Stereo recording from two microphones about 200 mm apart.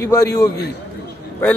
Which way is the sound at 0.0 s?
10° left (ahead or behind).